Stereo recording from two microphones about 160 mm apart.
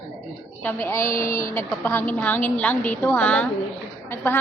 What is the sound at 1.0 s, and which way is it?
Speech, 55° left (ahead or behind).